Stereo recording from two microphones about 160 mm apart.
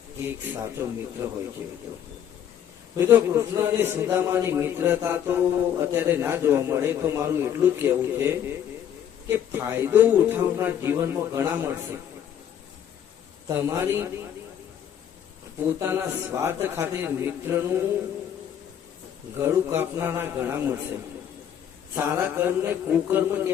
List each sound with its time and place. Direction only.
0.2 s speech: 15° right (ahead or behind)
3.0 s speech: 15° right (ahead or behind)
13.5 s speech: 15° right (ahead or behind)
15.8 s speech: 15° right (ahead or behind)
19.4 s speech: 15° right (ahead or behind)